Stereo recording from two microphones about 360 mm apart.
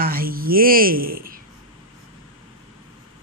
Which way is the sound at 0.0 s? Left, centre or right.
Right.